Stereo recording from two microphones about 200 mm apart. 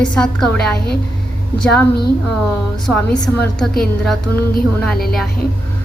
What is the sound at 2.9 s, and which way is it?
Speech, centre (ahead or behind).